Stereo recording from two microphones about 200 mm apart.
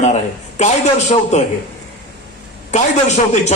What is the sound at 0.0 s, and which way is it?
A man's voice, 35° left (ahead or behind).